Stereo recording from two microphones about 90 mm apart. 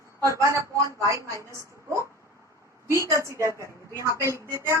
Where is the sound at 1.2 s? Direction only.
35° right (ahead or behind).